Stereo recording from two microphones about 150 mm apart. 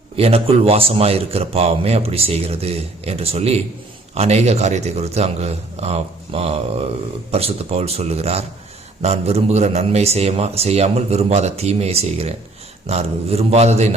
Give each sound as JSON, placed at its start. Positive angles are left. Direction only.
{"t": 0.2, "sound": "a man's voice", "side_deg": -40}